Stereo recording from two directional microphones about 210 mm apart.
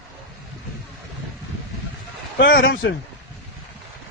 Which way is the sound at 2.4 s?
50° left (ahead or behind).